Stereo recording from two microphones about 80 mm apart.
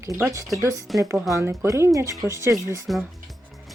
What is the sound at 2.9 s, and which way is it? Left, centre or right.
Speech, centre.